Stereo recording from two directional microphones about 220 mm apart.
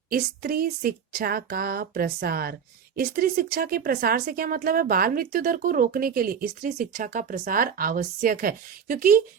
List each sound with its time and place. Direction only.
0.1 s a woman's voice: 40° right (ahead or behind)